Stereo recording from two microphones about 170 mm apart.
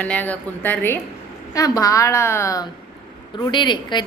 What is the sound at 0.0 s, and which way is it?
A woman's voice, 10° left (ahead or behind).